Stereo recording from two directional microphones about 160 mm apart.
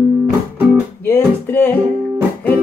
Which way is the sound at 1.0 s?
10° left (ahead or behind).